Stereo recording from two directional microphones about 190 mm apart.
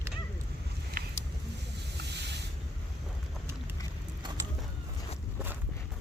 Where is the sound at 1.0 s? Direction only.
50° right (ahead or behind).